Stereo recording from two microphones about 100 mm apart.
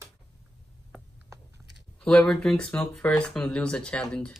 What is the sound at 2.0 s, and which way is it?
Speech, 5° left (ahead or behind).